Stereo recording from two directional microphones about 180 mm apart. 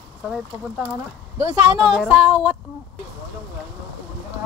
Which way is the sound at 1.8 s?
5° right (ahead or behind).